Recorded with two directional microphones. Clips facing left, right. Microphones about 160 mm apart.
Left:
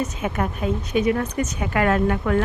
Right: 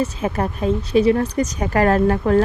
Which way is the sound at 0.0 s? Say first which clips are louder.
Right 3 dB; 35° right (ahead or behind).